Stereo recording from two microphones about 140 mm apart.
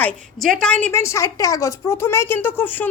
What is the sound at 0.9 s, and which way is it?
A woman's voice, 20° left (ahead or behind).